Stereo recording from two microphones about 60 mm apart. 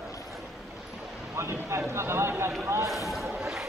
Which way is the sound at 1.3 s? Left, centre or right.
Right.